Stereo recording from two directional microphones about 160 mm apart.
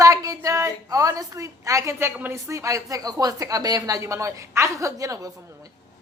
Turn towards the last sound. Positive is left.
turn(degrees=-20)  # may be behind; listen again after turning